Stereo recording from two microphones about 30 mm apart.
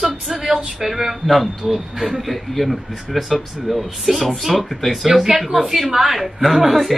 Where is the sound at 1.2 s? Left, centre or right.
Centre.